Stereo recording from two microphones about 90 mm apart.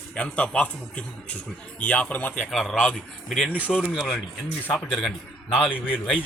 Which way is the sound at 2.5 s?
Centre (ahead or behind).